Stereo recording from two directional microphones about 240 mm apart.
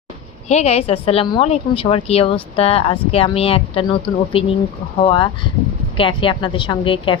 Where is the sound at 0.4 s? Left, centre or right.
Left.